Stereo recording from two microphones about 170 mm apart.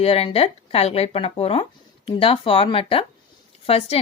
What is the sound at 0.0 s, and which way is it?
Speech, 35° left (ahead or behind).